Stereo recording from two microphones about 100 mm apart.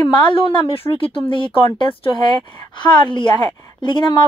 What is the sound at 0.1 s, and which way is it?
A woman's voice, 55° left (ahead or behind).